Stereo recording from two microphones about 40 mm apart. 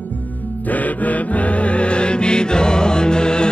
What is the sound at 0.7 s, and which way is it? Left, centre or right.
Music, left.